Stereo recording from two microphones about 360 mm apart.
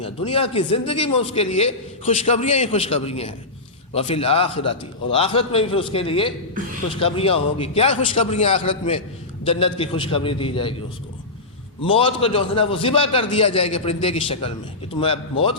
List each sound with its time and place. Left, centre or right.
0.0 s a man's voice: centre
11.8 s a man's voice: centre